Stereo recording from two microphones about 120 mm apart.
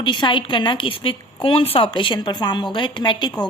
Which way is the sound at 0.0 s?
40° left (ahead or behind).